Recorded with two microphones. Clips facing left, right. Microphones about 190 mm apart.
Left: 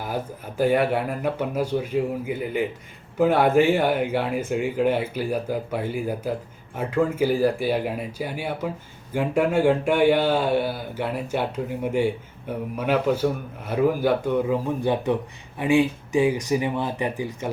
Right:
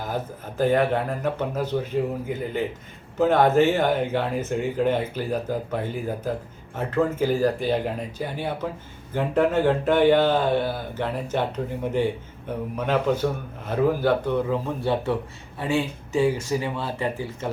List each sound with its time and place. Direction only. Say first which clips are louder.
0.0 s speech: even; 10° left (ahead or behind)
12.7 s speech: left 1 dB; 10° left (ahead or behind)